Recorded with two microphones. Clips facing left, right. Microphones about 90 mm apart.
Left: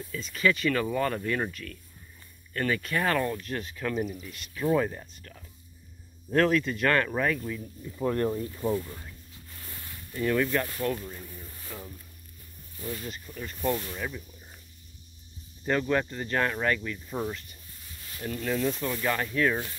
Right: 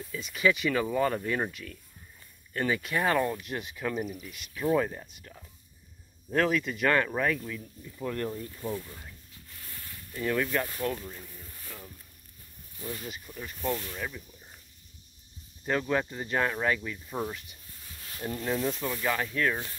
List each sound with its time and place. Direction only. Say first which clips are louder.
0.1 s speech: even; 15° right (ahead or behind)
5.0 s speech: even; 10° right (ahead or behind)
7.8 s speech: left 6 dB; 30° left (ahead or behind)
8.7 s speech: left 6 dB; 5° left (ahead or behind)
10.1 s speech: left 3 dB; centre (ahead or behind)
12.8 s speech: left 2 dB; 5° right (ahead or behind)
13.6 s speech: left 3 dB; 5° left (ahead or behind)
15.6 s speech: left 2 dB; 5° right (ahead or behind)
18.2 s speech: left 1 dB; 20° right (ahead or behind)
18.9 s speech: left 1 dB; 5° right (ahead or behind)